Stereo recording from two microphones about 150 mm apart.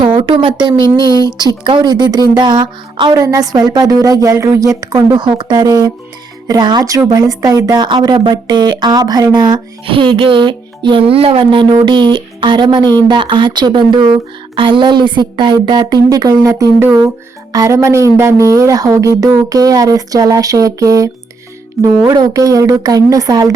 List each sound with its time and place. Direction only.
0.0 s speech: 35° right (ahead or behind)